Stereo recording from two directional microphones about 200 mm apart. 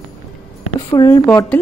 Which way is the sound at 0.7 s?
15° left (ahead or behind).